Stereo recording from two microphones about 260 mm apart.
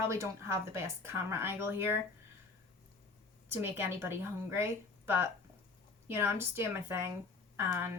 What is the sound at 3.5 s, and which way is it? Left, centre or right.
A woman's voice, centre.